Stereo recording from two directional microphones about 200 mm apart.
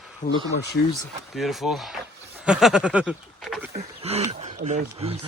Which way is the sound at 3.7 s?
30° right (ahead or behind).